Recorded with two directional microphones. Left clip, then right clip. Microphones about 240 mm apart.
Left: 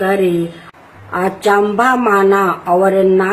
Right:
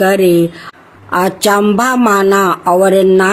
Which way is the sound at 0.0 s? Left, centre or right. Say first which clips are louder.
Right 5 dB; right.